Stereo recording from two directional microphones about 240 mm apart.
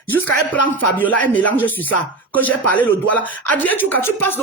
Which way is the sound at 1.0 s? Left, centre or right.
Centre.